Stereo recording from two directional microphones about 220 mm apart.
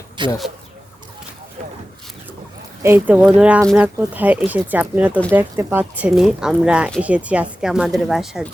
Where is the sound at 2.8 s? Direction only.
10° right (ahead or behind).